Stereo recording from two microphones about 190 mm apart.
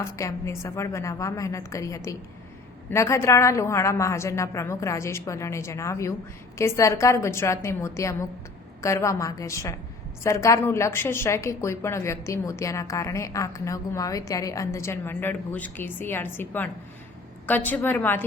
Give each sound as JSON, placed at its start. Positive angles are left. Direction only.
{"t": 0.0, "sound": "a woman's voice", "side_deg": 15}